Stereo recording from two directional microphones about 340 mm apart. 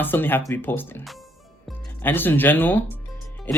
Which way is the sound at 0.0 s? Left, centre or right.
Centre.